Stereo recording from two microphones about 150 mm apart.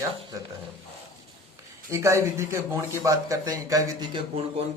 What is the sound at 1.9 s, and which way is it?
Speech, 20° right (ahead or behind).